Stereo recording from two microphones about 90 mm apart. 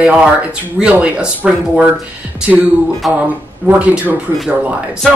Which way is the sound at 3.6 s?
15° right (ahead or behind).